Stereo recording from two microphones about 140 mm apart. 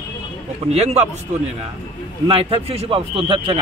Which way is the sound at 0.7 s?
50° right (ahead or behind).